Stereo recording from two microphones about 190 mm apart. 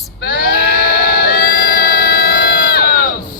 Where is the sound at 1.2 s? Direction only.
50° left (ahead or behind).